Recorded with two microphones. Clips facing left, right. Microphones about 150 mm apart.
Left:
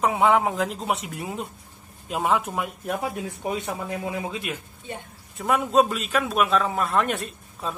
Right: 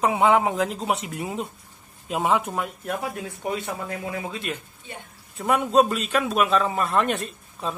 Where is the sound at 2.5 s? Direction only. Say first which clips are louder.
Even; 15° left (ahead or behind).